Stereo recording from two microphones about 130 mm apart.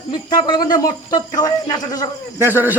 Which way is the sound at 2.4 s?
15° right (ahead or behind).